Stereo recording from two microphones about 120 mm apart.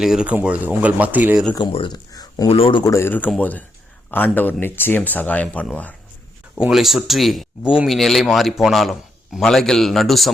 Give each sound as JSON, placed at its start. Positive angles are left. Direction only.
{"t": 0.0, "sound": "a man's voice", "side_deg": -5}
{"t": 1.5, "sound": "speech", "side_deg": 45}
{"t": 2.1, "sound": "a sound", "side_deg": 30}
{"t": 2.5, "sound": "speech", "side_deg": 50}
{"t": 2.8, "sound": "speech", "side_deg": 20}
{"t": 6.6, "sound": "a man's voice", "side_deg": -5}